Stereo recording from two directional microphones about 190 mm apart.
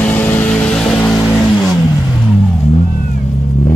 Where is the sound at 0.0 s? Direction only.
10° left (ahead or behind).